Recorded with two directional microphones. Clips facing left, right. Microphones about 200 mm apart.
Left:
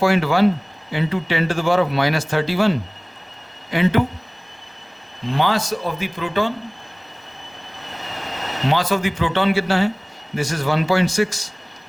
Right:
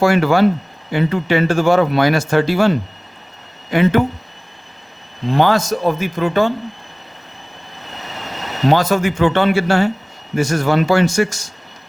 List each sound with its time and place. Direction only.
0.0 s speech: 45° right (ahead or behind)
5.4 s speech: 45° right (ahead or behind)
8.7 s speech: 45° right (ahead or behind)